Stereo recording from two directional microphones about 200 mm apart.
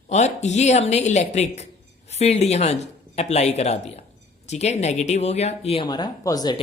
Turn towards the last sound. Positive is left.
turn(degrees=20)  # may be behind; listen again after turning